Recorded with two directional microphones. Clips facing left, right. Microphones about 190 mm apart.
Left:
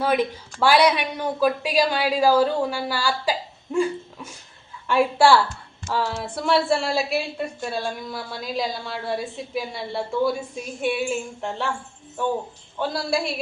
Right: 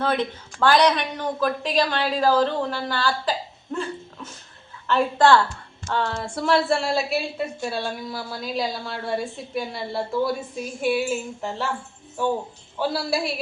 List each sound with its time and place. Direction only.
0.0 s a woman's voice: 10° left (ahead or behind)
12.8 s a woman's voice: 5° right (ahead or behind)